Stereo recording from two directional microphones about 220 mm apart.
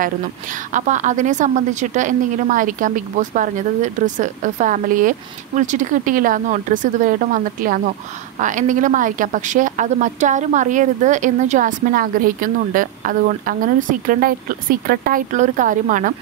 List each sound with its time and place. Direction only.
0.7 s a woman's voice: 35° right (ahead or behind)